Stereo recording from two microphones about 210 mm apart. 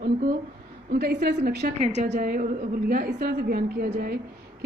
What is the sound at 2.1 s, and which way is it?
A woman's voice, 45° right (ahead or behind).